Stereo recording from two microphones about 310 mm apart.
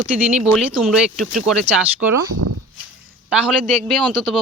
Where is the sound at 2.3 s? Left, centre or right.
Right.